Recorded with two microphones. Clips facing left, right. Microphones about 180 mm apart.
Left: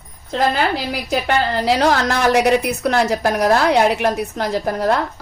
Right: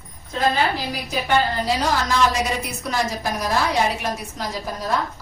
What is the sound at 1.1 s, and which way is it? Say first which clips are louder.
A woman's voice: left 2 dB; 80° left.